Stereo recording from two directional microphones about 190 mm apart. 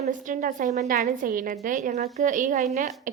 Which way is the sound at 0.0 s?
40° right (ahead or behind).